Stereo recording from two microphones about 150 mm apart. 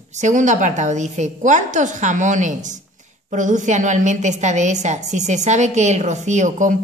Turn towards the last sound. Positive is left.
turn(degrees=-55)  # may be behind; listen again after turning